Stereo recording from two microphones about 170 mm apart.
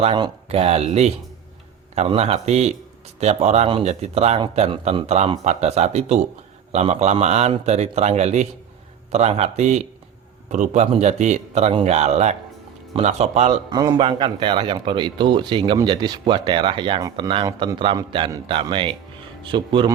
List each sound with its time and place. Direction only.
0.0 s a man's voice: 35° right (ahead or behind)
13.7 s speech: 25° right (ahead or behind)